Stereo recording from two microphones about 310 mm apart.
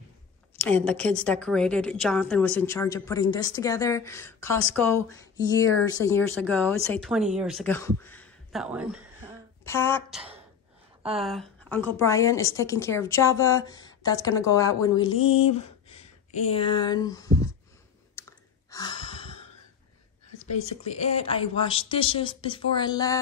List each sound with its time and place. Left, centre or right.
0.7 s a woman's voice: centre
9.7 s a woman's voice: centre
15.1 s a sound: left
16.3 s speech: centre
18.2 s sigh: centre
18.7 s gasp: centre
20.8 s a woman's voice: centre